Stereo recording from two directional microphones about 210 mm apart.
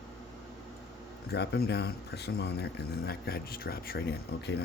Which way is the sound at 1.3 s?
50° left (ahead or behind).